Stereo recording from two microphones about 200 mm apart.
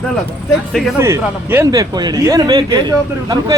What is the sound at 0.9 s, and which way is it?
Speech, 15° right (ahead or behind).